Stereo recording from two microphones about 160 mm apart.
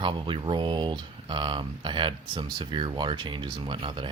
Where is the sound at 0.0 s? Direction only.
30° right (ahead or behind).